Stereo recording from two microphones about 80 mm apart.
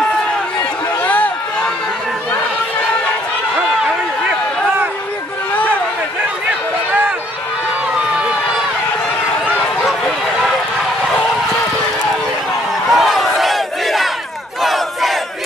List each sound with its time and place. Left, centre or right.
1.0 s a sound: left
6.9 s run: centre
9.8 s run: centre
12.9 s battle cry: centre